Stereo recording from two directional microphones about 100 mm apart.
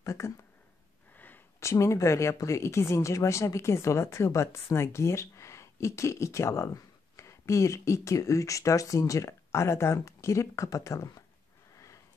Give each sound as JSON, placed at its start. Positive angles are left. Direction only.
{"t": 0.0, "sound": "speech", "side_deg": 30}
{"t": 1.1, "sound": "a sound", "side_deg": 15}
{"t": 1.6, "sound": "speech", "side_deg": 30}